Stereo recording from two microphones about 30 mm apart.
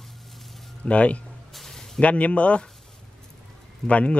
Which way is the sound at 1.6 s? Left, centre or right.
Centre.